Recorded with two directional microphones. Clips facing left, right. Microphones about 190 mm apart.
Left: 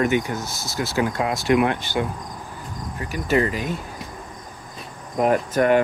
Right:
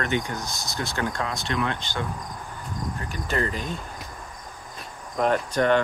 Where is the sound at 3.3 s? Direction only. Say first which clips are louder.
Left 7 dB; 5° left (ahead or behind).